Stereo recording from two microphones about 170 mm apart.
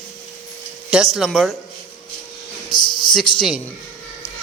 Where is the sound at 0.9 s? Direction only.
Centre (ahead or behind).